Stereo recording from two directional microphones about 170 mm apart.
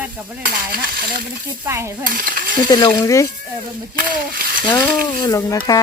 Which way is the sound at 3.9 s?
55° right (ahead or behind).